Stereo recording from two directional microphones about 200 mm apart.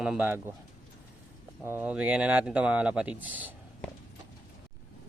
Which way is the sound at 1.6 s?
10° right (ahead or behind).